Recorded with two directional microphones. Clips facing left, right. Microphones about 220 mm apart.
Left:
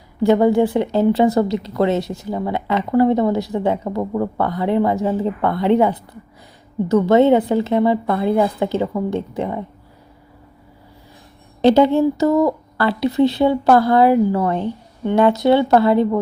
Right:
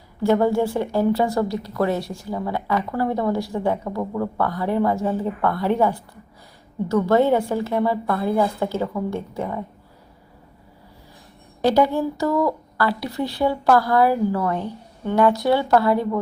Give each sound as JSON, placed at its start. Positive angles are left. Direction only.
{"t": 0.2, "sound": "a woman's voice", "side_deg": 15}
{"t": 11.6, "sound": "a woman's voice", "side_deg": 25}